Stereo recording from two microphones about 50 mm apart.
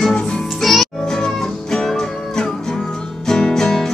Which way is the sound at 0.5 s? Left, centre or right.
Centre.